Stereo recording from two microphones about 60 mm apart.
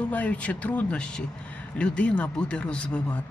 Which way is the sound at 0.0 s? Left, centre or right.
Left.